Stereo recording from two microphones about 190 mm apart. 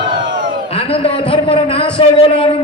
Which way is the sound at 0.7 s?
30° left (ahead or behind).